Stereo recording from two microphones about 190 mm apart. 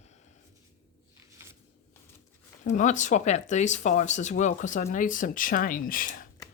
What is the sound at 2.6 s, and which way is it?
Speech, 40° left (ahead or behind).